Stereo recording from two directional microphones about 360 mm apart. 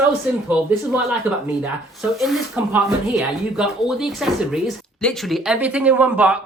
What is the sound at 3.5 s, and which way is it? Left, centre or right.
Speech, centre.